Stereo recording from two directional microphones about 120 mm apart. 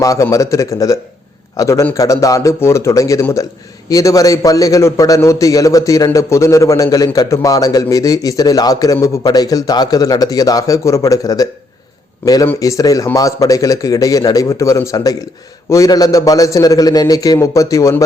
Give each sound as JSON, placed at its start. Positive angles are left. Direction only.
{"t": 0.0, "sound": "a man's voice", "side_deg": 25}